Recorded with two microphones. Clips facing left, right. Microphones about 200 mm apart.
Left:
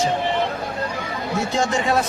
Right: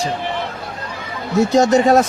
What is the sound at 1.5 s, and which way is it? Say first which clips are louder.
Speech: right 9 dB; 40° right (ahead or behind).